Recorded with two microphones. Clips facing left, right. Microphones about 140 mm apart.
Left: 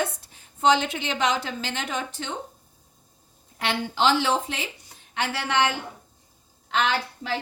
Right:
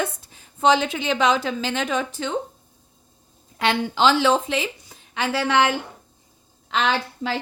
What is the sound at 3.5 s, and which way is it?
A woman's voice, 90° right.